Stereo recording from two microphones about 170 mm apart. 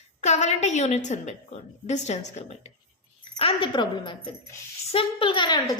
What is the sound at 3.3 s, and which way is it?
A woman's voice, 30° left (ahead or behind).